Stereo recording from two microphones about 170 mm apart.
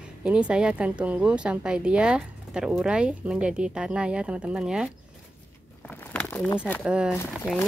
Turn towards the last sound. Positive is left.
turn(degrees=10)  # may be behind; listen again after turning